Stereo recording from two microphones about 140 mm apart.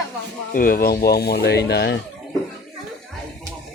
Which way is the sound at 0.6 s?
90° left.